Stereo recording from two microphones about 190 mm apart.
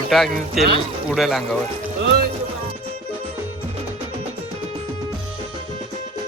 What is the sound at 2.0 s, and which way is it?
Music, 60° right (ahead or behind).